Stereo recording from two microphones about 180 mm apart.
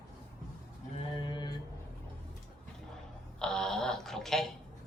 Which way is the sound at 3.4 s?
5° left (ahead or behind).